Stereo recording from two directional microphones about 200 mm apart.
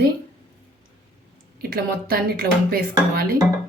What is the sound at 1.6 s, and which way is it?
Speech, 50° right (ahead or behind).